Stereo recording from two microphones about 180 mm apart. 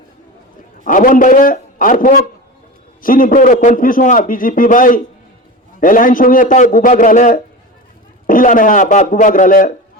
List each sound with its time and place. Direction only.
0.9 s a man's voice: 50° left (ahead or behind)